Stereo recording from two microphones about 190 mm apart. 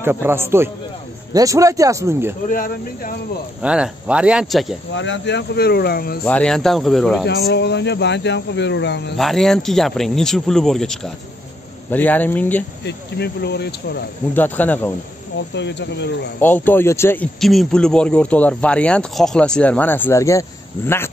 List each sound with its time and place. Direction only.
0.0 s speech: 10° right (ahead or behind)
2.5 s speech: 45° left (ahead or behind)
3.6 s speech: 5° right (ahead or behind)
4.9 s speech: 75° left (ahead or behind); by 6.1 s 55° left (ahead or behind)
6.2 s speech: 5° left (ahead or behind)
7.2 s speech: 65° left (ahead or behind)
9.1 s speech: centre (ahead or behind)
12.8 s speech: 60° left (ahead or behind)
14.3 s speech: 10° left (ahead or behind)
15.5 s speech: 65° left (ahead or behind)
16.3 s speech: 10° left (ahead or behind)